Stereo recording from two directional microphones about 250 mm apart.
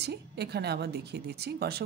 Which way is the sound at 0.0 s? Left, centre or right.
Right.